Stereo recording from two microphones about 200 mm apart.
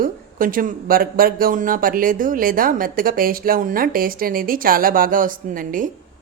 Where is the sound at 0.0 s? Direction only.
45° right (ahead or behind).